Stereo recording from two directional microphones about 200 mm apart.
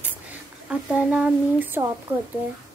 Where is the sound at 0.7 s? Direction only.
5° right (ahead or behind).